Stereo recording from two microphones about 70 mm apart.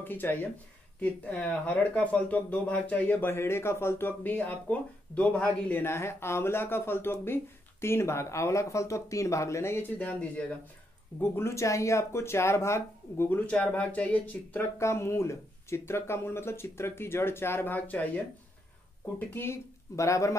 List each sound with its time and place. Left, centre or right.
0.0 s speech: left
5.9 s speech: left
9.8 s speech: left
11.1 s speech: left
13.3 s speech: centre
14.8 s speech: left
19.1 s speech: left